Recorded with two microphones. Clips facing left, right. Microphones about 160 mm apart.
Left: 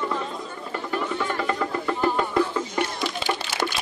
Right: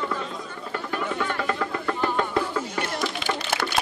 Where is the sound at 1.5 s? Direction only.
5° left (ahead or behind).